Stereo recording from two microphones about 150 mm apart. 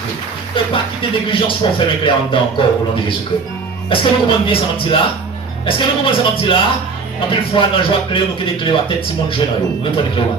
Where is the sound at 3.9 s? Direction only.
35° left (ahead or behind).